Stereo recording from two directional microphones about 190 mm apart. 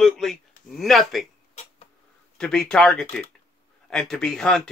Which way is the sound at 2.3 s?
5° left (ahead or behind).